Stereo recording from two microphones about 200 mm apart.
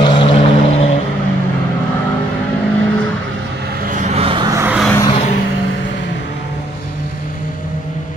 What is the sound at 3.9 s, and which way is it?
Vehicle, 35° right (ahead or behind).